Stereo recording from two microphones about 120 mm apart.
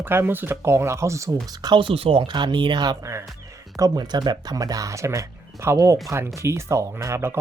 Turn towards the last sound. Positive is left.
turn(degrees=-20)  # may be behind; listen again after turning